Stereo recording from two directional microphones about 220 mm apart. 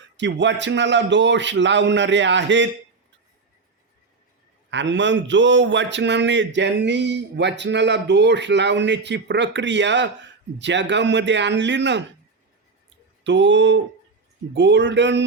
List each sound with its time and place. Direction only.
0.2 s a man's voice: 55° right (ahead or behind)
4.7 s a man's voice: 55° right (ahead or behind)
13.2 s a man's voice: 55° right (ahead or behind)